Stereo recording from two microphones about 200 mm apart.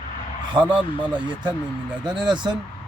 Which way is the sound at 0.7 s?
25° right (ahead or behind).